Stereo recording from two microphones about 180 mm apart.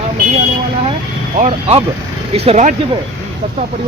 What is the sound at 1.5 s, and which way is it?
Speech, 30° right (ahead or behind).